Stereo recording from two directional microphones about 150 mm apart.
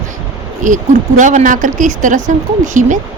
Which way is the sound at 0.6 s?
60° right (ahead or behind).